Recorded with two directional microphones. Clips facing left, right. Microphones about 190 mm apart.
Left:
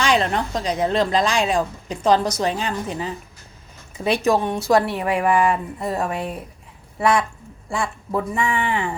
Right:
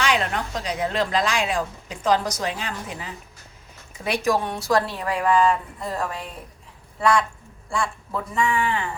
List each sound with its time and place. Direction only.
0.0 s a woman's voice: 30° left (ahead or behind)